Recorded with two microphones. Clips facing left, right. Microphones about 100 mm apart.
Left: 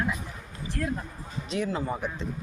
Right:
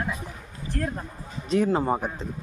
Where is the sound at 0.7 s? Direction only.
40° right (ahead or behind).